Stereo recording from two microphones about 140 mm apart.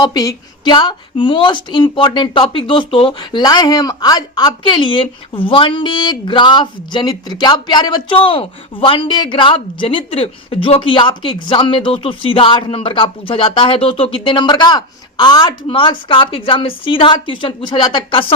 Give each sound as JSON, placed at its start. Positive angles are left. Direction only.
{"t": 0.0, "sound": "a woman's voice", "side_deg": 30}